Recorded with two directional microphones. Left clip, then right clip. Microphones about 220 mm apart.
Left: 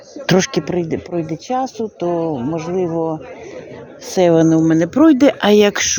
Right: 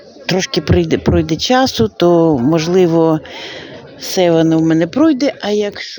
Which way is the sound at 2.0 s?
35° right (ahead or behind).